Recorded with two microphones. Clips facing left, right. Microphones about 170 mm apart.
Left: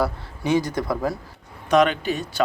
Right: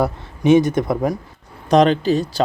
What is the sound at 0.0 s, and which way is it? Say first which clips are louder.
Speech: right 6 dB; 20° right (ahead or behind).